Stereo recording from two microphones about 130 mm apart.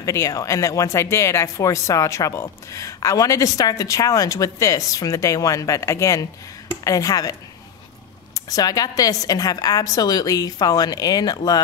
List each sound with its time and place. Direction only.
0.0 s speech: 25° left (ahead or behind)
8.4 s speech: 30° left (ahead or behind)